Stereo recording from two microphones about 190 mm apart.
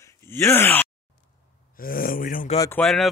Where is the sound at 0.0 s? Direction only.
15° left (ahead or behind).